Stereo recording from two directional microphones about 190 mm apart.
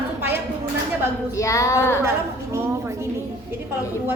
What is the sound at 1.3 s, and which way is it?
Speech, 15° left (ahead or behind).